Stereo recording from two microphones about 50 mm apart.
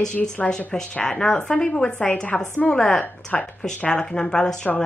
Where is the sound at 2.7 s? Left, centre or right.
Centre.